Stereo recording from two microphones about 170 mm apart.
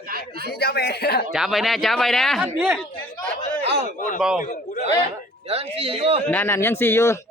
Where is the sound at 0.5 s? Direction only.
70° left (ahead or behind).